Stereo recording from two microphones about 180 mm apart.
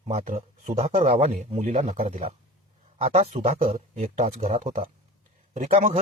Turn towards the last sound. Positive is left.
turn(degrees=-40)  # may be behind; listen again after turning